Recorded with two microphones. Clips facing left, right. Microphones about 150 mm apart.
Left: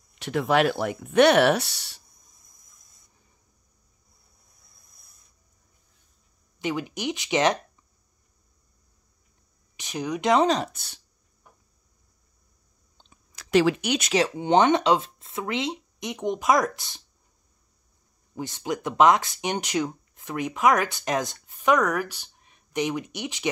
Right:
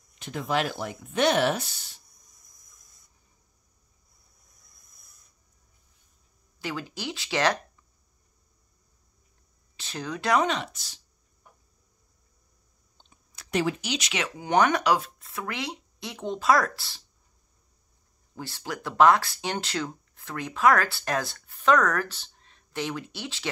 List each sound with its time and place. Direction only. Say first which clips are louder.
0.2 s speech: left 6 dB; 70° left (ahead or behind)
6.6 s speech: left 5 dB; 20° left (ahead or behind)
9.8 s speech: left 5 dB; 15° left (ahead or behind)
10.4 s speech: left 5 dB; 35° left (ahead or behind)
10.7 s speech: left 2 dB; 55° left (ahead or behind)
12.9 s clicking: left 2 dB; 90° left; by 14.1 s 55° left (ahead or behind)
14.1 s speech: left 4 dB; 30° left (ahead or behind)
18.3 s speech: left 6 dB; 20° left (ahead or behind)